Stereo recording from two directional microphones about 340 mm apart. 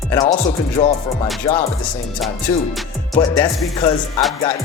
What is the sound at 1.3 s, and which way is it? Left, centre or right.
Speech, centre.